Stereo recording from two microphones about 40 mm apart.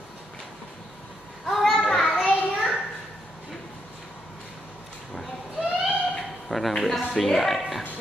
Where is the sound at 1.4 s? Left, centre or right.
Centre.